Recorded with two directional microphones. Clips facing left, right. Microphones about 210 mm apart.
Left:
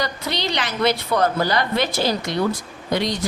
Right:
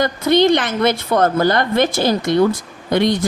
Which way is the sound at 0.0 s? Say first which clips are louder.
Right 11 dB; 50° right (ahead or behind).